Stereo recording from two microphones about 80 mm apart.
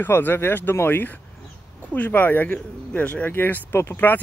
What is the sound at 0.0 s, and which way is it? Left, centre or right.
Speech, left.